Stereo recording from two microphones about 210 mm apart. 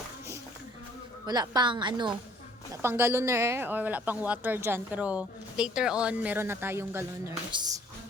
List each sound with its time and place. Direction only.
1.3 s a woman's voice: 20° right (ahead or behind)
2.8 s a woman's voice: 10° right (ahead or behind)